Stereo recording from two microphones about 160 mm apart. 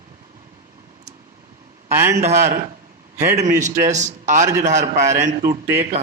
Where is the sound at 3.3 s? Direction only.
50° right (ahead or behind).